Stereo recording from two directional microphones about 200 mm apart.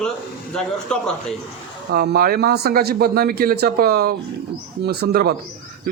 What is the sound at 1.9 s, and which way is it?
A man's voice, 50° right (ahead or behind).